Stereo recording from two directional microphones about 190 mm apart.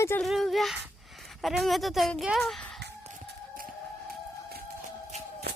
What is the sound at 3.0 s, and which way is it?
Music, 45° right (ahead or behind).